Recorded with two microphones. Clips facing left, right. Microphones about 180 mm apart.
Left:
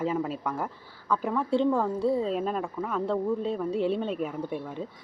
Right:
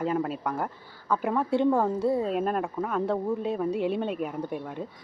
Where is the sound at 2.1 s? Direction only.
5° right (ahead or behind).